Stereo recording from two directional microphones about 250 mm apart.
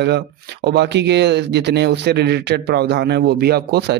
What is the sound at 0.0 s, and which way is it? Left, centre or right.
Speech, right.